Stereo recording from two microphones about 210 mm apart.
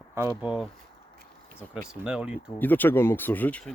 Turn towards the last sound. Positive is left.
turn(degrees=5)  # may be behind; listen again after turning